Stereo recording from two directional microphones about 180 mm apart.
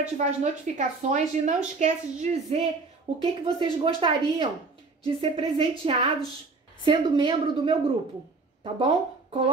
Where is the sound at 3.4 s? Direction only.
30° right (ahead or behind).